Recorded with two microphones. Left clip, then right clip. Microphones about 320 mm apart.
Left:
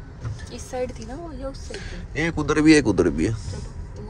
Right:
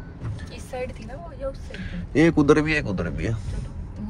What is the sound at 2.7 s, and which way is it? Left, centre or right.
Speech, left.